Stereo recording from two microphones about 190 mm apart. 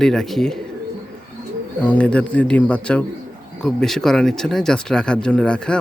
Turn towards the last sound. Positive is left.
turn(degrees=5)  # may be behind; listen again after turning